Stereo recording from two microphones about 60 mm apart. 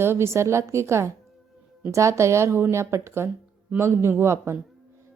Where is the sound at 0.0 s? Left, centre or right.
Right.